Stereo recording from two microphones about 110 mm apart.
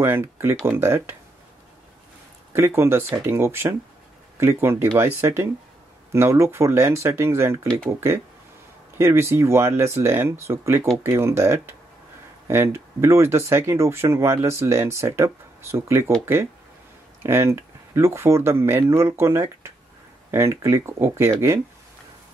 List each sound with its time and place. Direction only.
0.0 s speech: 20° right (ahead or behind)
2.5 s speech: 25° right (ahead or behind)
8.9 s speech: 25° right (ahead or behind)
17.2 s speech: 25° right (ahead or behind)